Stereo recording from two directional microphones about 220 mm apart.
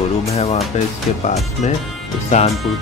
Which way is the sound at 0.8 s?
30° left (ahead or behind).